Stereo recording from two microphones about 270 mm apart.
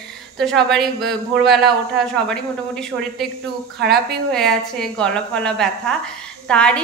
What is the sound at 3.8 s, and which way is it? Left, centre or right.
Speech, right.